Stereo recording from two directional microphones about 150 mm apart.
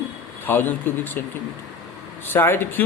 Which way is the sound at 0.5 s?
15° left (ahead or behind).